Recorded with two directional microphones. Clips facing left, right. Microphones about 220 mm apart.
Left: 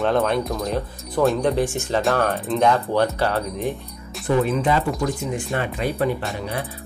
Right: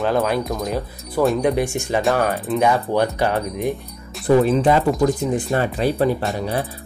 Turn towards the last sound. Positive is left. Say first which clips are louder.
# right 4 dB
turn(degrees=-35)  # may be behind; listen again after turning